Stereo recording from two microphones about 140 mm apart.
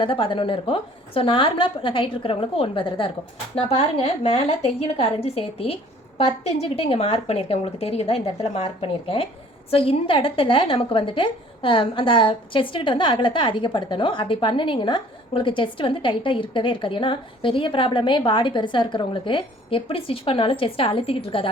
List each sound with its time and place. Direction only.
0.0 s a woman's voice: 40° left (ahead or behind)